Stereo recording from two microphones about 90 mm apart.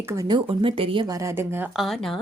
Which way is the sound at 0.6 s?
80° right.